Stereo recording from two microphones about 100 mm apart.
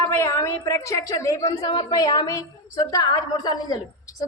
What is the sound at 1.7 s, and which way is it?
A woman's voice, 50° left (ahead or behind).